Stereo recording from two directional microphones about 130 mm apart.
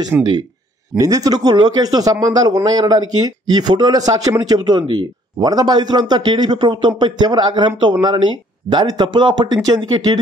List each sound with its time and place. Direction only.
0.1 s speech: 10° right (ahead or behind)
0.9 s speech: 25° right (ahead or behind)